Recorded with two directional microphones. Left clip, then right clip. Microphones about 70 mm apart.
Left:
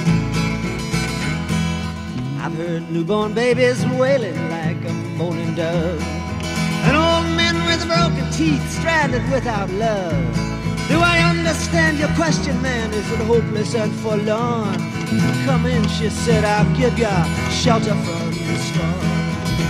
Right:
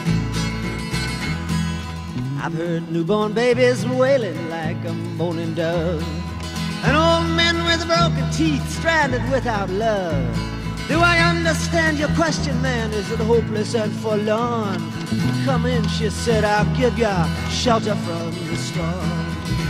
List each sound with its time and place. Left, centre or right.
3.1 s music: centre
5.2 s music: centre
6.9 s music: centre
18.8 s music: right